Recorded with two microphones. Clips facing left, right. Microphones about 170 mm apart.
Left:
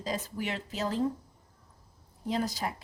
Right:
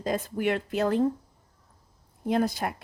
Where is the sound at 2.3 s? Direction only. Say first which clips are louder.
Right 6 dB; 55° right (ahead or behind).